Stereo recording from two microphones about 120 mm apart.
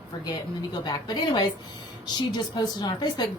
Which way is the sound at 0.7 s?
35° left (ahead or behind).